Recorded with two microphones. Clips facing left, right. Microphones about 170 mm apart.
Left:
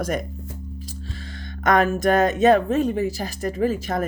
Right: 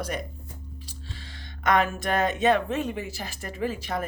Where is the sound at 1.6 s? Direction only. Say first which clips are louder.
Left 6 dB; 45° left (ahead or behind).